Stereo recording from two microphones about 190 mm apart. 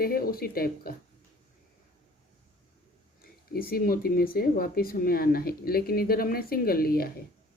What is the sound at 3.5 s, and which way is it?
Speech, 50° left (ahead or behind).